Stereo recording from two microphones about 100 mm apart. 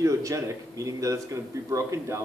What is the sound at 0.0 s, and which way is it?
Speech, 30° right (ahead or behind).